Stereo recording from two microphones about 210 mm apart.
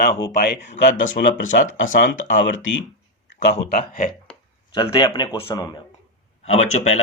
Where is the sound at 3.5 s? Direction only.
45° left (ahead or behind).